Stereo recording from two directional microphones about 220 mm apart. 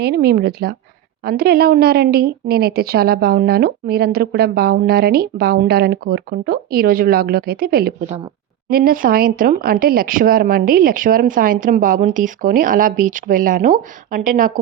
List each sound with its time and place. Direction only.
0.0 s a woman's voice: 45° right (ahead or behind)